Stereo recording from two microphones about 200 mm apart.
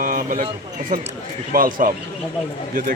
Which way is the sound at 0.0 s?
45° right (ahead or behind).